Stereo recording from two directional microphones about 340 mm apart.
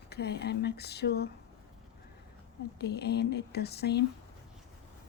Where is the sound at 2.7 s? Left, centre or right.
Left.